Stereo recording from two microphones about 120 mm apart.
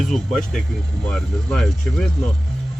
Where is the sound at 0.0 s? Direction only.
Centre (ahead or behind).